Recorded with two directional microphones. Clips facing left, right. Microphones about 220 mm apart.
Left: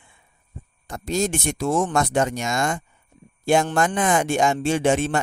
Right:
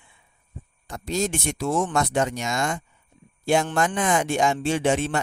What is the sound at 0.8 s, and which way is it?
Speech, 50° left (ahead or behind).